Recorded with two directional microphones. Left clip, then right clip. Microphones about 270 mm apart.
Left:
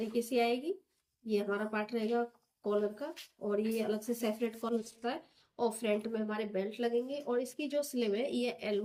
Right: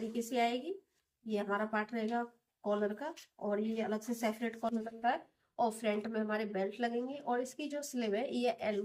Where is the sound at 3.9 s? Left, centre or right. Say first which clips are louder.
Left 2 dB; right.